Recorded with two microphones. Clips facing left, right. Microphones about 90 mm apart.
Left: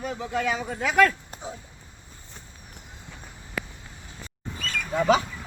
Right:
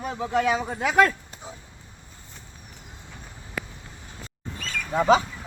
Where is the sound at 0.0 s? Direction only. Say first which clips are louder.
Right 3 dB; 25° right (ahead or behind).